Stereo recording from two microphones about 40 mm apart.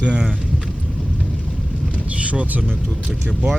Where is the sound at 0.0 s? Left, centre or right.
Right.